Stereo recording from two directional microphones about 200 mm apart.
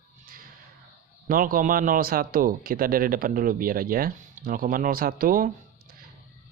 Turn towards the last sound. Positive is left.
turn(degrees=-45)  # may be behind; listen again after turning